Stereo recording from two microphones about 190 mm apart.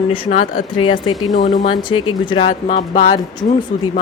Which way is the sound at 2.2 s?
25° left (ahead or behind).